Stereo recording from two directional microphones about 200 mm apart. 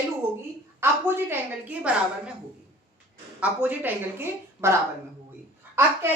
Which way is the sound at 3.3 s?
5° right (ahead or behind).